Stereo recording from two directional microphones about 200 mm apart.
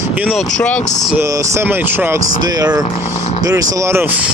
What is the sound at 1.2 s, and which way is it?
Speech, 15° right (ahead or behind).